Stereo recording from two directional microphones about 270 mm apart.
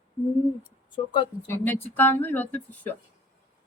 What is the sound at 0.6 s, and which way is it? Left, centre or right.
Speech, centre.